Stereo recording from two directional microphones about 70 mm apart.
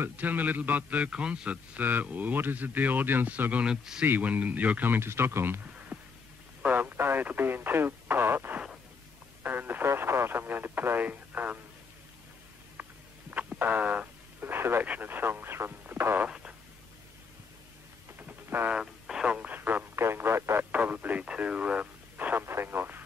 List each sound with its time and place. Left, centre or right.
0.0 s a man's voice: right
3.6 s speech: centre
4.0 s a man's voice: right
13.6 s radio: right
14.9 s a man's voice: right
16.3 s fart: centre
18.2 s a sound: right
18.7 s radio: centre; by 19.9 s right
20.0 s speech: right
20.7 s speech: right